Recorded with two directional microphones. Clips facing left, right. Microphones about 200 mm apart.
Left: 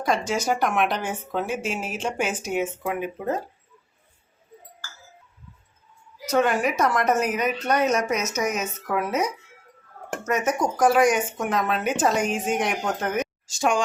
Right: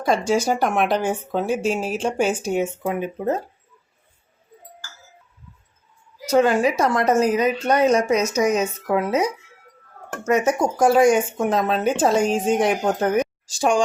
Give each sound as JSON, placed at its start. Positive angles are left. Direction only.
{"t": 0.0, "sound": "speech", "side_deg": -30}
{"t": 6.2, "sound": "speech", "side_deg": -30}